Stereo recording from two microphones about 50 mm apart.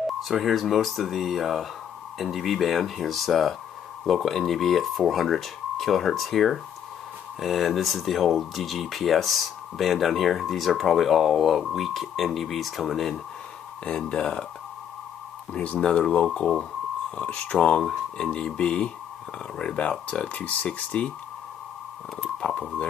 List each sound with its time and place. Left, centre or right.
0.2 s speech: centre
13.8 s speech: centre
15.5 s speech: left
22.4 s speech: centre